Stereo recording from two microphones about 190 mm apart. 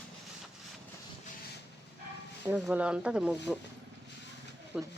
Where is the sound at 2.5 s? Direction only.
5° right (ahead or behind).